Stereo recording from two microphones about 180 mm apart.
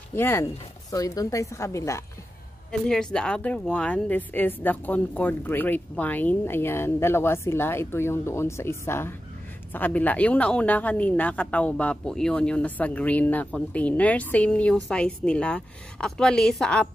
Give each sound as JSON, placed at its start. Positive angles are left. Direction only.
{"t": 0.1, "sound": "a woman's voice", "side_deg": 15}
{"t": 2.7, "sound": "a woman's voice", "side_deg": 5}